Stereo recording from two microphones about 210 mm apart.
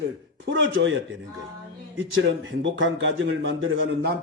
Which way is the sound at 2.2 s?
65° right (ahead or behind).